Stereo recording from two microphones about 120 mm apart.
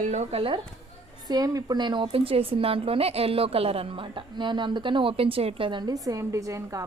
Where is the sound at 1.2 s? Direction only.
35° right (ahead or behind).